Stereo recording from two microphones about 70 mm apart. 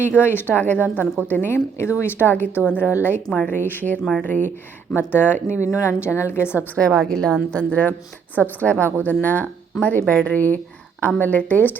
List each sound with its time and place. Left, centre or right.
0.0 s a woman's voice: left
5.7 s a woman's voice: left
6.7 s a woman's voice: centre
7.5 s speech: centre